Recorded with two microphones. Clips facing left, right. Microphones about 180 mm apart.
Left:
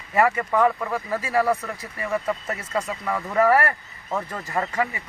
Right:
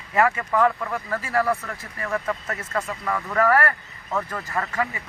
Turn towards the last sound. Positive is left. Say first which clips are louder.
# left 2 dB
turn(degrees=20)  # may be behind; listen again after turning